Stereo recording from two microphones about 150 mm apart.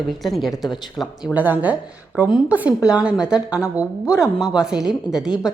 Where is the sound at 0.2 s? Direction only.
Centre (ahead or behind).